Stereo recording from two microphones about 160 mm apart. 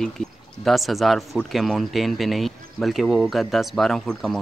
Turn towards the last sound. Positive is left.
turn(degrees=0)  # may be behind; listen again after turning